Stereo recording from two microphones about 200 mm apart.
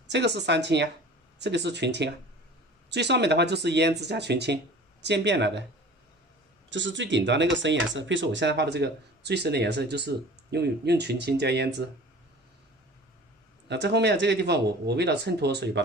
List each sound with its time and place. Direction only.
0.1 s speech: 60° right (ahead or behind)
6.7 s speech: 65° right (ahead or behind)
13.7 s speech: 60° right (ahead or behind)